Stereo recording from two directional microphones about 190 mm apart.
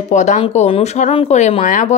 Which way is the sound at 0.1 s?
40° left (ahead or behind).